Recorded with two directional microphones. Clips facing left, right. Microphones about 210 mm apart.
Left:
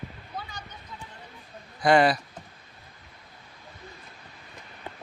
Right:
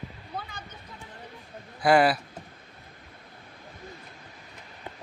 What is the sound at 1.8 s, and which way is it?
Speech, 5° right (ahead or behind).